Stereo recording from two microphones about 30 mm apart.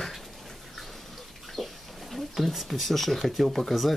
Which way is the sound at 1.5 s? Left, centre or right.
Centre.